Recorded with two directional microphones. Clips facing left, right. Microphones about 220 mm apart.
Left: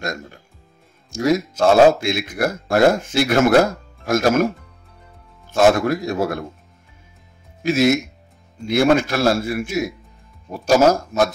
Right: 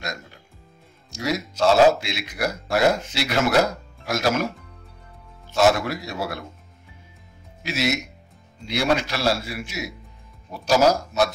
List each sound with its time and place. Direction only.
0.0 s a man's voice: 50° left (ahead or behind)
5.5 s a man's voice: 50° left (ahead or behind)
7.6 s a man's voice: 50° left (ahead or behind)